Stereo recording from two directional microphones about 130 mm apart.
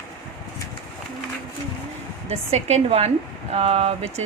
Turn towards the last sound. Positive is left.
turn(degrees=-55)  # may be behind; listen again after turning